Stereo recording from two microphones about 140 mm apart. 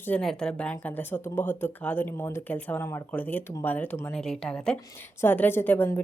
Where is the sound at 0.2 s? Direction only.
5° left (ahead or behind).